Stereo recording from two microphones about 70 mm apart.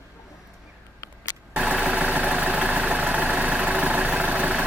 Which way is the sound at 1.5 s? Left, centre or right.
Centre.